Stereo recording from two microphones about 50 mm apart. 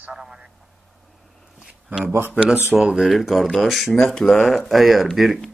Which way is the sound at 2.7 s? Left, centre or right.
Centre.